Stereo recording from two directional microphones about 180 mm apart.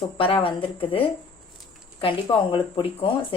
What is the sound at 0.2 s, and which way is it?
Speech, 30° left (ahead or behind).